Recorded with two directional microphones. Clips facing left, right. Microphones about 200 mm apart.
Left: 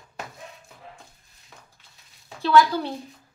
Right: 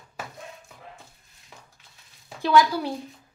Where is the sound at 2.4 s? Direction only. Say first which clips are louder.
Left 1 dB; 15° right (ahead or behind).